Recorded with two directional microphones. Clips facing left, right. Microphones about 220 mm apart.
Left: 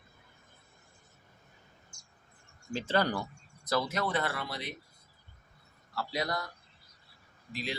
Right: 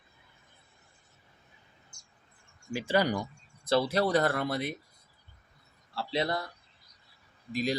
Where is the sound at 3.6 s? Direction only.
30° right (ahead or behind); by 4.8 s 50° right (ahead or behind).